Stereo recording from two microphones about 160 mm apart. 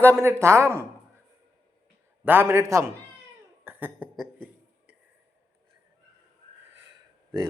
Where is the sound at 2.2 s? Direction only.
15° right (ahead or behind).